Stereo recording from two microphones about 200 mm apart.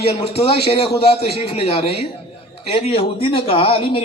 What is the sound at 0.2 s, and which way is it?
Speech, 30° left (ahead or behind).